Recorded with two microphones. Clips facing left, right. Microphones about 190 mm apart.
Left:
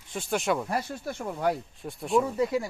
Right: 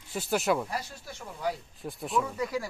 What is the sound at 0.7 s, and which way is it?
Speech, 55° left (ahead or behind).